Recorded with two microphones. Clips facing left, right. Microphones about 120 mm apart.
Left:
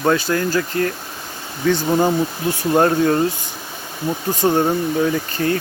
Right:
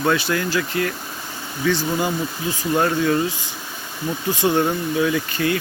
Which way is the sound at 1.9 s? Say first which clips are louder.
Left 6 dB; 35° left (ahead or behind).